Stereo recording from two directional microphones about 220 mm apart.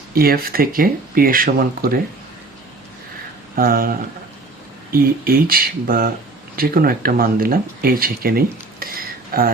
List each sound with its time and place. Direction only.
0.1 s speech: 45° right (ahead or behind)
3.5 s speech: 40° right (ahead or behind)